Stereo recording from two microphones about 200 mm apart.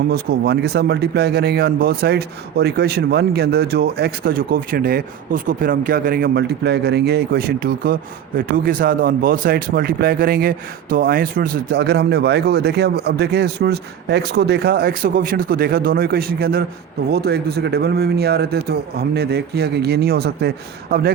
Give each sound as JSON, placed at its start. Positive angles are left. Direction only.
{"t": 0.1, "sound": "speech", "side_deg": -55}